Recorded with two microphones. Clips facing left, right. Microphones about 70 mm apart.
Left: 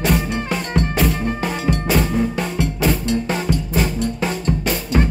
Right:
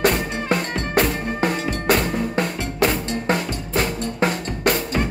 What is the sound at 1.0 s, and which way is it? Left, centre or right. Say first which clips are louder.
Drum: even; right.